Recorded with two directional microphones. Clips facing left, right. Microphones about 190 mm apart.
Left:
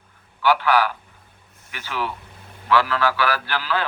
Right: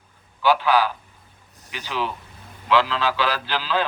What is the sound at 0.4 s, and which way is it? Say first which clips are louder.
A man's voice: even; 15° right (ahead or behind).